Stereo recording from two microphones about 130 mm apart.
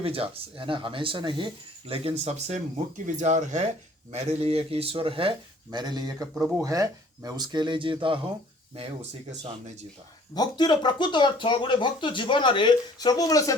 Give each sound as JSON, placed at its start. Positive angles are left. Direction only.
{"t": 0.0, "sound": "speech", "side_deg": -45}
{"t": 1.9, "sound": "speech", "side_deg": -55}
{"t": 5.7, "sound": "speech", "side_deg": -30}
{"t": 6.3, "sound": "speech", "side_deg": -5}
{"t": 6.6, "sound": "speech", "side_deg": -25}
{"t": 8.7, "sound": "speech", "side_deg": -50}
{"t": 10.3, "sound": "speech", "side_deg": 30}